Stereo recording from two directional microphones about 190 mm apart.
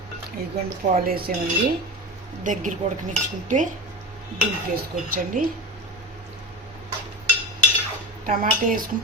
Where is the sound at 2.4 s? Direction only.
40° right (ahead or behind).